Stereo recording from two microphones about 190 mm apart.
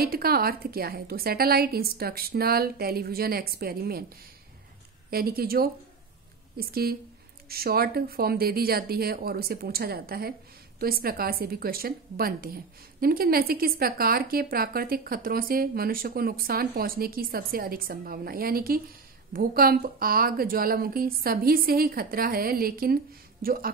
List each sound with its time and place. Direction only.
0.0 s speech: 55° right (ahead or behind)
5.1 s speech: 50° right (ahead or behind)